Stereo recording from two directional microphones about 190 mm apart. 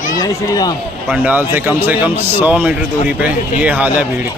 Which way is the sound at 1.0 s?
10° right (ahead or behind).